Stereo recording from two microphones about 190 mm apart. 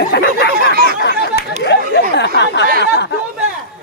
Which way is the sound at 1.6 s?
65° left (ahead or behind).